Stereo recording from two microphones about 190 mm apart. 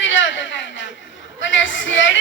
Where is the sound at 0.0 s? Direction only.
75° left (ahead or behind).